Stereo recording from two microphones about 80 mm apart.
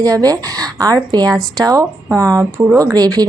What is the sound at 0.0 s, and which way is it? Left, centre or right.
Speech, right.